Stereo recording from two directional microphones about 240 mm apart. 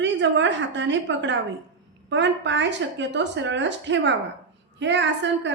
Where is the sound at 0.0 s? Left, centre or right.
Right.